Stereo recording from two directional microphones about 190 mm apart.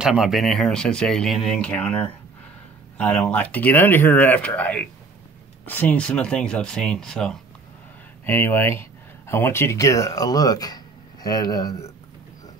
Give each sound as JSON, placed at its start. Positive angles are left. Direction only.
{"t": 0.0, "sound": "speech", "side_deg": 0}